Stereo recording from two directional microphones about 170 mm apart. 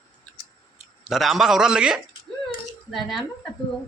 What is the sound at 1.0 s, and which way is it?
Speech, centre (ahead or behind).